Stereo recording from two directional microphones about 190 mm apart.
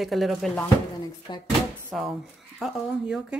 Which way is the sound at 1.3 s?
25° left (ahead or behind).